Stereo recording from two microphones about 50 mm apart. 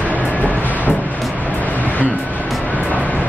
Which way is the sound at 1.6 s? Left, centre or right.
Left.